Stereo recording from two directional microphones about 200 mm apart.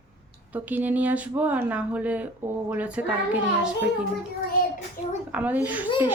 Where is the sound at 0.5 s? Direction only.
10° right (ahead or behind).